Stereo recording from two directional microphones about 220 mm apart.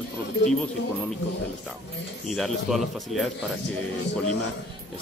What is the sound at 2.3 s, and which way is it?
Speech, centre (ahead or behind).